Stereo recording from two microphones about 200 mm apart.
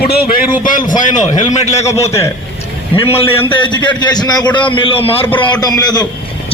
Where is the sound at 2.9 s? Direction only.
30° left (ahead or behind).